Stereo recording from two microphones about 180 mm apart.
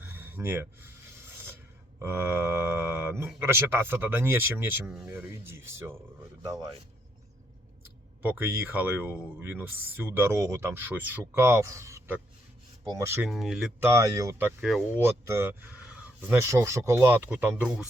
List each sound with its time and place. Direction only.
0.0 s a sound: 10° right (ahead or behind)
2.0 s mantra: 10° right (ahead or behind)
3.4 s speech: 15° right (ahead or behind)
8.2 s speech: 10° right (ahead or behind)
13.2 s speech: centre (ahead or behind)
13.7 s speech: 15° right (ahead or behind)
14.6 s speech: centre (ahead or behind)
14.9 s speech: 15° right (ahead or behind)